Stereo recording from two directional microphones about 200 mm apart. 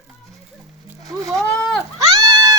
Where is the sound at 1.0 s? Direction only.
15° right (ahead or behind).